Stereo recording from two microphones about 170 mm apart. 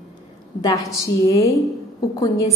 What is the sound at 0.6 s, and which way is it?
A woman's voice, 20° left (ahead or behind).